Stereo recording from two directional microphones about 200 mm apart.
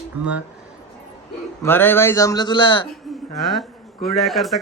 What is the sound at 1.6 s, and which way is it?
A man's voice, 10° left (ahead or behind).